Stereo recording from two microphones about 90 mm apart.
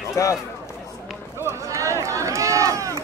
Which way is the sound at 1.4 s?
35° right (ahead or behind).